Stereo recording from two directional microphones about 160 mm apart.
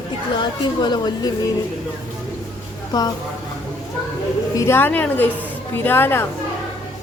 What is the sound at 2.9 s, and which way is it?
Speech, 25° left (ahead or behind).